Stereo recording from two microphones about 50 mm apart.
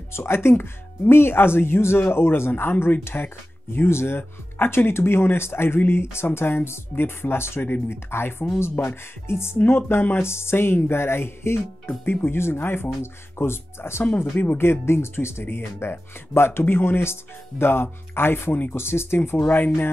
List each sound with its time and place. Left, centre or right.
0.1 s speech: left
3.0 s music: left
4.6 s speech: left
9.3 s music: left
9.7 s speech: left
10.1 s music: left
12.0 s speech: left
14.3 s speech: left
14.6 s music: left
15.4 s speech: left